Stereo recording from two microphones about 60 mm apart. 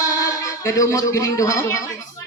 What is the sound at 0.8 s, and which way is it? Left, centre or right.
A man's voice, left.